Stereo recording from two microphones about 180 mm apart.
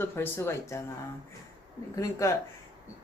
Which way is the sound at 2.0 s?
20° left (ahead or behind).